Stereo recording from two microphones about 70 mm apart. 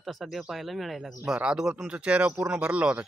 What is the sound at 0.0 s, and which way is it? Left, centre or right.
Speech, centre.